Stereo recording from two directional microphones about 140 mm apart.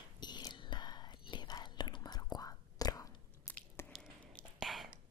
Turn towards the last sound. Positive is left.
turn(degrees=0)  # may be behind; listen again after turning